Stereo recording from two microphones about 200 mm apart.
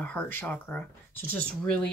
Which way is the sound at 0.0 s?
10° left (ahead or behind).